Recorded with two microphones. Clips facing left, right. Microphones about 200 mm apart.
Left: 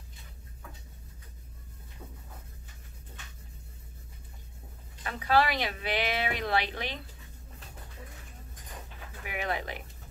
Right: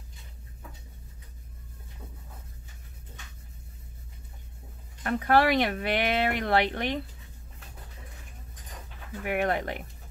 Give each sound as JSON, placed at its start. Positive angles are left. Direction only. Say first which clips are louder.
{"t": 5.0, "sound": "speech", "louder": "right 4 dB", "side_deg": -55}
{"t": 9.2, "sound": "speech", "louder": "right 7 dB", "side_deg": -60}